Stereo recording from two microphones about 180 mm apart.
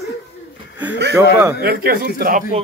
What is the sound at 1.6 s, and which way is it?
Speech, 60° right (ahead or behind).